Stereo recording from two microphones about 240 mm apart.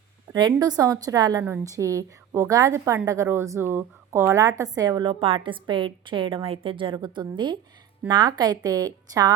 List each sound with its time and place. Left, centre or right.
0.3 s a woman's voice: centre